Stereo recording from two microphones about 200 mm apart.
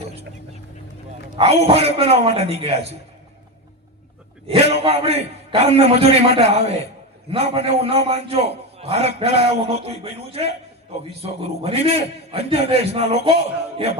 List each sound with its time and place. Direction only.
1.4 s a man's voice: 30° right (ahead or behind)
4.7 s a man's voice: 30° right (ahead or behind)